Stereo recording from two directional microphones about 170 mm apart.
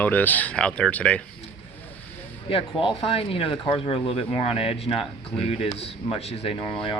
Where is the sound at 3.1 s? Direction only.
35° left (ahead or behind).